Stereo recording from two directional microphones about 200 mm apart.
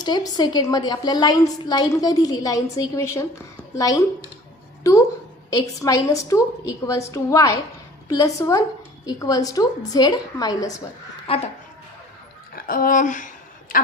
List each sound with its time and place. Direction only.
0.0 s a woman's voice: 20° left (ahead or behind)
11.3 s a woman's voice: 30° left (ahead or behind)
12.5 s a sound: 45° left (ahead or behind)